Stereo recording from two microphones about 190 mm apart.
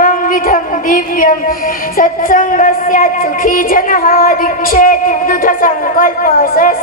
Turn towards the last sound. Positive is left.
turn(degrees=45)  # may be behind; listen again after turning